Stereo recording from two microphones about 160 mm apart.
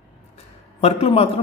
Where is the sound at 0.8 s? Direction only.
40° left (ahead or behind).